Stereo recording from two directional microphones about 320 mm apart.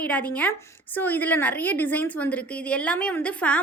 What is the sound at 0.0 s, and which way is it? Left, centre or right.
A woman's voice, centre.